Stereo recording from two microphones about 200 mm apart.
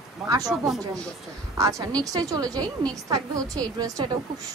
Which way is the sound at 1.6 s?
15° right (ahead or behind).